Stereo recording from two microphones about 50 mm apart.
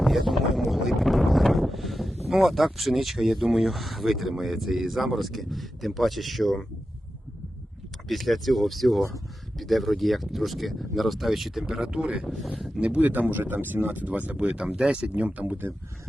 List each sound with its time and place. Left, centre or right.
0.0 s speech: centre
8.0 s speech: centre
11.6 s speech: centre
12.5 s speech: centre
13.0 s speech: right